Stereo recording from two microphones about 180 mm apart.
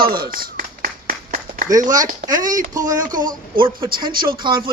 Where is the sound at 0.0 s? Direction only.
55° right (ahead or behind).